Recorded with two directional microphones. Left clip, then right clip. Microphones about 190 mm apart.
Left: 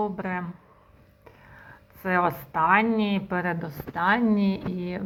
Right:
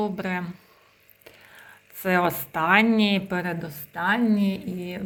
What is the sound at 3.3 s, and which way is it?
Speech, 5° right (ahead or behind).